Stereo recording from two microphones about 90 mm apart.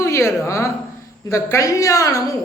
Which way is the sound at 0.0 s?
30° left (ahead or behind).